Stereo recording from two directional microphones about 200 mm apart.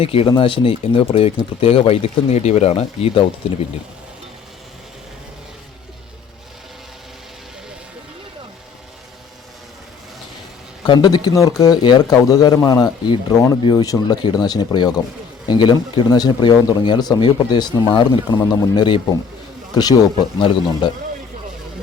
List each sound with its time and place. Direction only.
0.0 s speech: 30° left (ahead or behind)
10.8 s speech: 20° left (ahead or behind)